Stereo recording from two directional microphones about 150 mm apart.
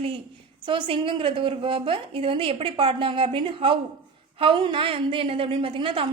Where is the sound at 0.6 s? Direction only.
35° right (ahead or behind).